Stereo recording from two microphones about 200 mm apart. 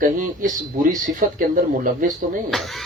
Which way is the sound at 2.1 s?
Centre (ahead or behind).